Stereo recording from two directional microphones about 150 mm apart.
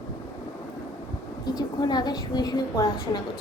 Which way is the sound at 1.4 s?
25° left (ahead or behind).